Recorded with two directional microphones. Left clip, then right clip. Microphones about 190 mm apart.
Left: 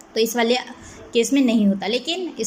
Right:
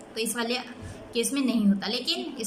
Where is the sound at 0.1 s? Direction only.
20° left (ahead or behind).